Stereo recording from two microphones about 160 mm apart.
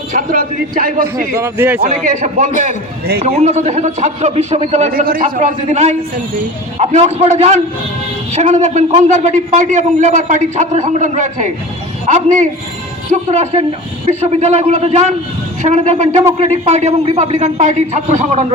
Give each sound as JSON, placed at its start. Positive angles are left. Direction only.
{"t": 0.1, "sound": "speech", "side_deg": -60}
{"t": 1.4, "sound": "a man's voice", "side_deg": -10}
{"t": 2.0, "sound": "a man's voice", "side_deg": -50}
{"t": 4.9, "sound": "speech", "side_deg": -65}
{"t": 5.6, "sound": "a man's voice", "side_deg": -45}